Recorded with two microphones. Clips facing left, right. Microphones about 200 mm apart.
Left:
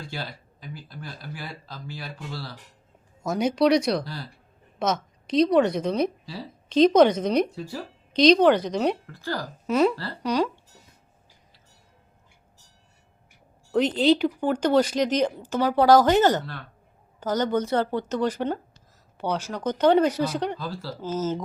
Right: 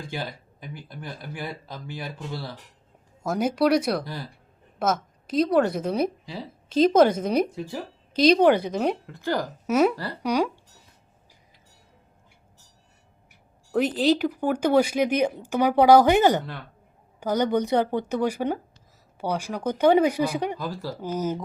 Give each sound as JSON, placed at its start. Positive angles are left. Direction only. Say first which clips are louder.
{"t": 0.0, "sound": "speech", "louder": "right 3 dB", "side_deg": -15}
{"t": 3.2, "sound": "a woman's voice", "louder": "left 1 dB", "side_deg": -5}
{"t": 9.0, "sound": "speech", "louder": "right 4 dB", "side_deg": -20}
{"t": 9.6, "sound": "speech", "louder": "even", "side_deg": -5}
{"t": 13.7, "sound": "speech", "louder": "left 1 dB", "side_deg": -5}